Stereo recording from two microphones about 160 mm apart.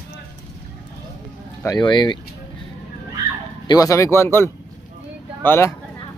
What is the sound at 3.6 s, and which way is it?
Speech, 20° left (ahead or behind).